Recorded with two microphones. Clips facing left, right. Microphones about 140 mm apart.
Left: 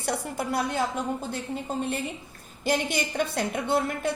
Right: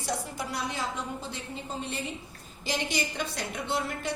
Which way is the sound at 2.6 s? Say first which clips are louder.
Left 5 dB; 55° left (ahead or behind).